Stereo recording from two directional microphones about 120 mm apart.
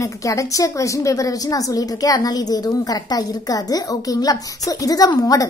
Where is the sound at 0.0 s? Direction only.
30° left (ahead or behind).